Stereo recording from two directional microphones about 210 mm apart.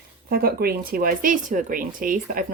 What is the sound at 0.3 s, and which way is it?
Speech, 45° right (ahead or behind).